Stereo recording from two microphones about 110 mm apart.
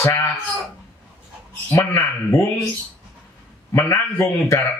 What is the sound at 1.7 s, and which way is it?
Speech, 30° left (ahead or behind).